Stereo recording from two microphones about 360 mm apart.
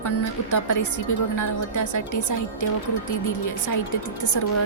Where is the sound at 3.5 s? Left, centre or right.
Left.